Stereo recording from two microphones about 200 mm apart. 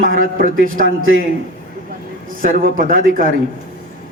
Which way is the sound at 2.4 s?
45° right (ahead or behind).